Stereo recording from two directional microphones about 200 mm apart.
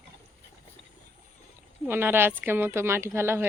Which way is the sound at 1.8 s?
10° right (ahead or behind).